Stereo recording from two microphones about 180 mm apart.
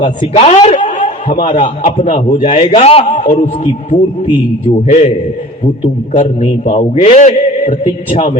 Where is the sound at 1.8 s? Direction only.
40° left (ahead or behind).